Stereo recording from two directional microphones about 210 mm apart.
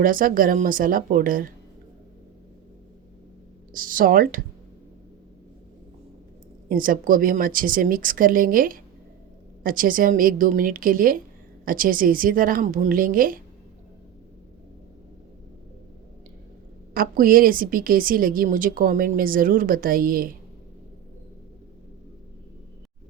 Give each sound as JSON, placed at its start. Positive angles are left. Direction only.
{"t": 0.0, "sound": "speech", "side_deg": -40}
{"t": 3.7, "sound": "speech", "side_deg": -40}
{"t": 6.7, "sound": "speech", "side_deg": -40}
{"t": 16.9, "sound": "a woman's voice", "side_deg": -45}